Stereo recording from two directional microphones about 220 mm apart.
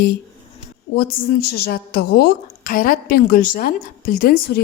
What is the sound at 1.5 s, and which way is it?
A woman's voice, 45° left (ahead or behind).